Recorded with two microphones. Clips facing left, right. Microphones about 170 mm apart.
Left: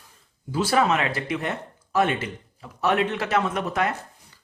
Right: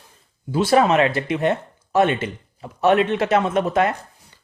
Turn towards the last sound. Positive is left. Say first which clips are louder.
# right 6 dB
turn(degrees=-25)  # may be behind; listen again after turning